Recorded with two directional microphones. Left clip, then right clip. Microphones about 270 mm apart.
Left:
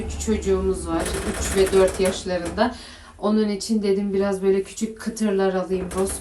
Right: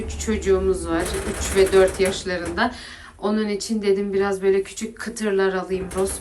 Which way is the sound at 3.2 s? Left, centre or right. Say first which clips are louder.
Left 1 dB; centre.